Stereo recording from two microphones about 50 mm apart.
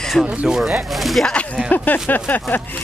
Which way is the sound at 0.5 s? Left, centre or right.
Centre.